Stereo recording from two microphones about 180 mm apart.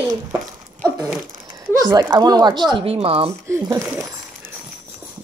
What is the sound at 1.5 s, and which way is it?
Speech, 20° right (ahead or behind).